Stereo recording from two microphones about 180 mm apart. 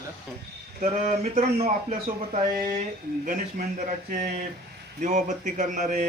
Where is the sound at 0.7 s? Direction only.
40° right (ahead or behind).